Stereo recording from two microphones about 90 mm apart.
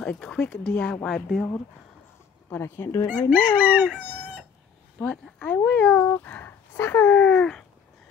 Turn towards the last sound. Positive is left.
turn(degrees=10)  # may be behind; listen again after turning